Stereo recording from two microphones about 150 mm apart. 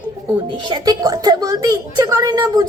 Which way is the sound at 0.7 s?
25° right (ahead or behind).